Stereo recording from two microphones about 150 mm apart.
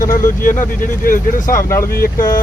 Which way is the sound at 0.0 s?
65° left (ahead or behind).